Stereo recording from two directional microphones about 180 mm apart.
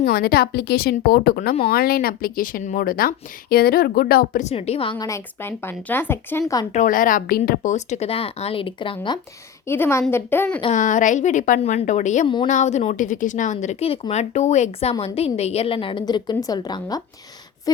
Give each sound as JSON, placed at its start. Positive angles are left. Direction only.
{"t": 0.0, "sound": "a woman's voice", "side_deg": 55}
{"t": 6.7, "sound": "a woman's voice", "side_deg": 50}
{"t": 9.6, "sound": "a woman's voice", "side_deg": 15}
{"t": 10.8, "sound": "a woman's voice", "side_deg": 45}